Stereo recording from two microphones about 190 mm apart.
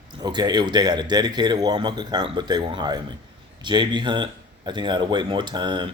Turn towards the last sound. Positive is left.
turn(degrees=-25)  # may be behind; listen again after turning